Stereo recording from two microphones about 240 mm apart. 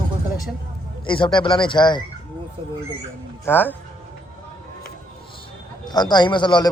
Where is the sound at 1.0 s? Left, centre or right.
Centre.